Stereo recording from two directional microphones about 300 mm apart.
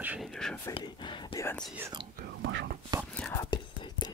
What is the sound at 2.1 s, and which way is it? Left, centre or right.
Whispering, right.